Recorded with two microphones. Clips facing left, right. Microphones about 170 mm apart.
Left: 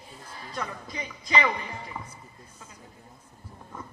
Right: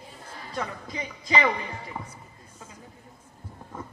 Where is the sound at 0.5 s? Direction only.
30° right (ahead or behind).